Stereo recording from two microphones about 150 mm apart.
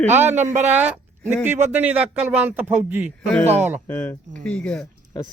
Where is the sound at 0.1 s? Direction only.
15° right (ahead or behind).